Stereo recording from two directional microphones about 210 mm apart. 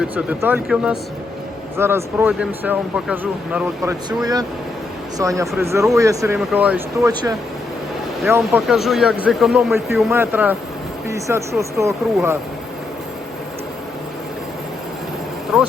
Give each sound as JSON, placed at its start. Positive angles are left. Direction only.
{"t": 0.0, "sound": "speech", "side_deg": -10}
{"t": 4.2, "sound": "speech", "side_deg": -20}
{"t": 7.1, "sound": "speech", "side_deg": -20}
{"t": 8.4, "sound": "speech", "side_deg": 0}
{"t": 15.5, "sound": "speech", "side_deg": 0}